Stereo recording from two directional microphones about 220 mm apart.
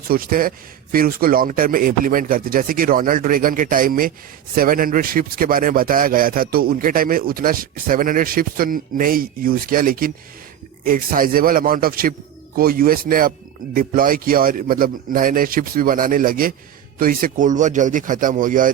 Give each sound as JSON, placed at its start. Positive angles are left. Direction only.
{"t": 0.1, "sound": "speech", "side_deg": -40}